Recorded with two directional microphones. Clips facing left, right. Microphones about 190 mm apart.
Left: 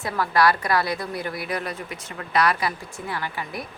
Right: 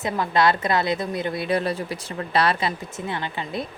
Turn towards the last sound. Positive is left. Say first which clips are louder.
# right 3 dB
turn(degrees=-25)  # may be behind; listen again after turning